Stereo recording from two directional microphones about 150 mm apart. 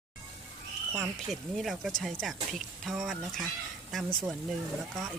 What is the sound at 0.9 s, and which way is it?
Speech, centre (ahead or behind).